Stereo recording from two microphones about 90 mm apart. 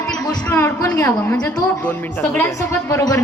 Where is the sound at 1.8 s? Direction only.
20° left (ahead or behind).